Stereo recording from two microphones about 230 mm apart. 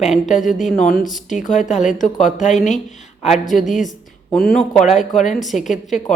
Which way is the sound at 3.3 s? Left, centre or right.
Centre.